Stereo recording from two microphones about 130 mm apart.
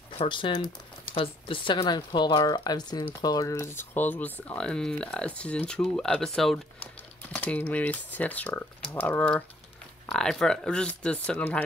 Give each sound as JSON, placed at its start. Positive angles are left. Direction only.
{"t": 0.2, "sound": "speech", "side_deg": 40}
{"t": 7.3, "sound": "speech", "side_deg": 15}